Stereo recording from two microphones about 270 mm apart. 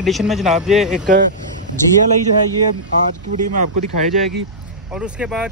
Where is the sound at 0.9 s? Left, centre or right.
Right.